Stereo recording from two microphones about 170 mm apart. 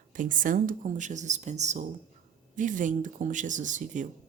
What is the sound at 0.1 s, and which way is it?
Speech, 50° right (ahead or behind).